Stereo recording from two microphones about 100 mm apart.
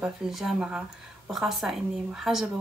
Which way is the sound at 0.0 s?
5° right (ahead or behind).